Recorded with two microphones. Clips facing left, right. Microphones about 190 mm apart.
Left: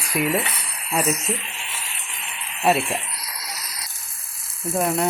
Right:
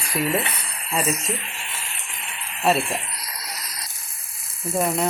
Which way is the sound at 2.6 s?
5° left (ahead or behind).